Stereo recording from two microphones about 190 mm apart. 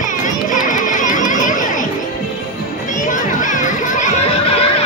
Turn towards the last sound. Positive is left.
turn(degrees=30)  # may be behind; listen again after turning